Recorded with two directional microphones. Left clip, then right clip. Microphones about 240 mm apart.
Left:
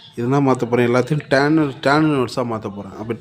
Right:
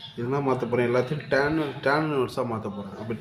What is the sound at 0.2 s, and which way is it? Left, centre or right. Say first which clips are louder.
Speech: left 8 dB; left.